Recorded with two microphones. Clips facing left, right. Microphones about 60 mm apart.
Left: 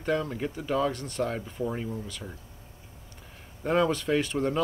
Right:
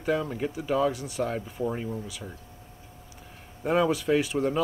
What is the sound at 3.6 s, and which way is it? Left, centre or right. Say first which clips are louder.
Speech: right 1 dB; centre.